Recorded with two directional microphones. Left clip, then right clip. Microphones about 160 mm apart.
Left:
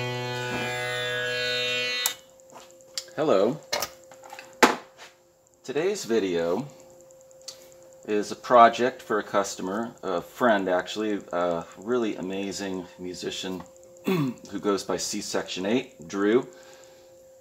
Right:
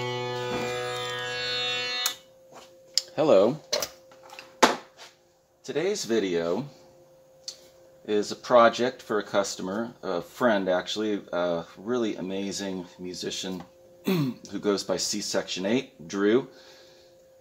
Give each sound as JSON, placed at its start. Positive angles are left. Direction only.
{"t": 0.2, "sound": "music", "side_deg": 90}
{"t": 2.9, "sound": "a sound", "side_deg": -45}
{"t": 5.7, "sound": "speech", "side_deg": -25}
{"t": 8.0, "sound": "speech", "side_deg": -25}